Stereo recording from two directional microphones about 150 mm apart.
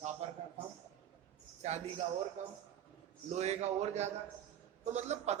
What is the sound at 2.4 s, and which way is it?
A man's voice, 55° right (ahead or behind).